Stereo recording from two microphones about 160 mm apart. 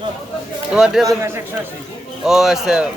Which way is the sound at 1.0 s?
20° right (ahead or behind).